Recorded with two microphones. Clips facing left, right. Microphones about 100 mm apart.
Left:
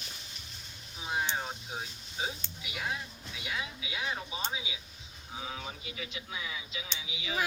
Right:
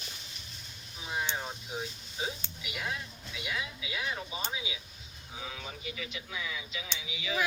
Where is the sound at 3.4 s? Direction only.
25° left (ahead or behind).